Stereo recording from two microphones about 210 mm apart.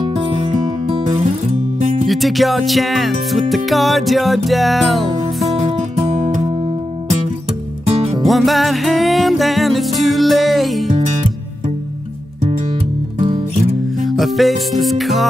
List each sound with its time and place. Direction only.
0.8 s music: 25° right (ahead or behind)
2.0 s music: centre (ahead or behind)
5.6 s music: 30° right (ahead or behind)
7.9 s music: 30° right (ahead or behind)
8.3 s music: centre (ahead or behind)
14.0 s music: centre (ahead or behind)